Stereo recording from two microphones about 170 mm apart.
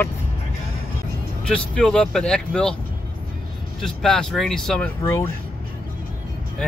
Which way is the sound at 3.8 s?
Centre (ahead or behind).